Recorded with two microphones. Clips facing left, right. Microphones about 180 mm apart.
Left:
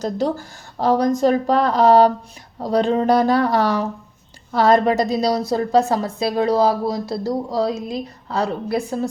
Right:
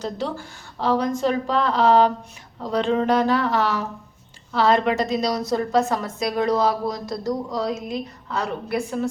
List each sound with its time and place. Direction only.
0.0 s a woman's voice: 40° left (ahead or behind)